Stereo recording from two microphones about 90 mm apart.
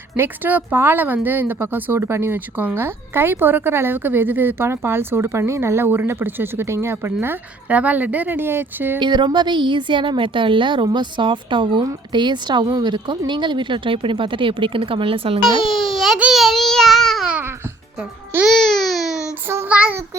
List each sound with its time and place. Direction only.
0.2 s a woman's voice: 20° right (ahead or behind)
9.0 s a woman's voice: 60° right (ahead or behind)
10.8 s a woman's voice: 55° right (ahead or behind); by 15.4 s 90° right
15.6 s speech: 5° right (ahead or behind)
16.3 s child singing: centre (ahead or behind)
18.4 s baby cry: 5° left (ahead or behind)
19.6 s child singing: 15° right (ahead or behind)